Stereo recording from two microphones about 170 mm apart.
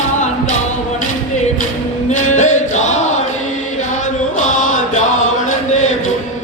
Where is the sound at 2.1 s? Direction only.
45° left (ahead or behind).